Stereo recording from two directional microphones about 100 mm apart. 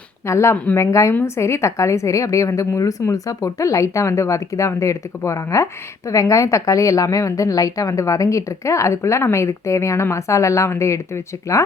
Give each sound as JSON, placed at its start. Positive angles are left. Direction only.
{"t": 0.3, "sound": "a woman's voice", "side_deg": 30}
{"t": 0.5, "sound": "speech", "side_deg": 15}
{"t": 0.8, "sound": "a woman's voice", "side_deg": 30}